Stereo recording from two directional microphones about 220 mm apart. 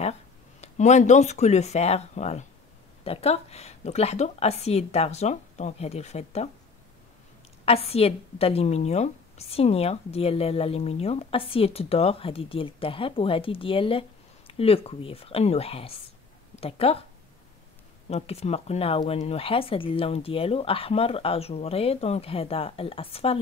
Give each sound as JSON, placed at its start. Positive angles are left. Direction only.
{"t": 0.6, "sound": "a woman's voice", "side_deg": 30}
{"t": 7.6, "sound": "a woman's voice", "side_deg": 25}
{"t": 18.1, "sound": "a woman's voice", "side_deg": 30}